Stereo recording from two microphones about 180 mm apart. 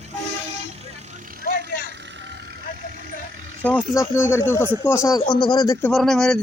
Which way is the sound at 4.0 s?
15° left (ahead or behind).